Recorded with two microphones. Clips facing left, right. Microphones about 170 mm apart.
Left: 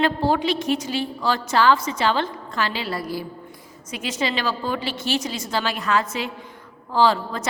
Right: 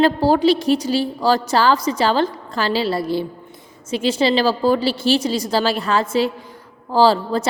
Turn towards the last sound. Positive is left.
turn(degrees=-35)  # may be behind; listen again after turning